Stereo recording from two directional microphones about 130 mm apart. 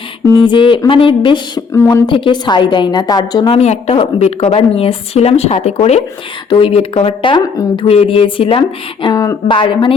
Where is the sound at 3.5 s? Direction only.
55° left (ahead or behind).